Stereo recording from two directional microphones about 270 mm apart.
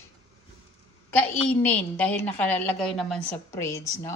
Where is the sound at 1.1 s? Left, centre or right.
Centre.